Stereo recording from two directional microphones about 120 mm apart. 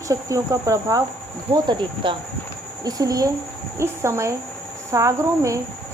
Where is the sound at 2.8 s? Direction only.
30° right (ahead or behind).